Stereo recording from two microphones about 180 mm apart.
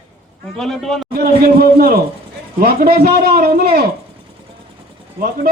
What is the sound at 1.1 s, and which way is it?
A man's voice, 60° right (ahead or behind).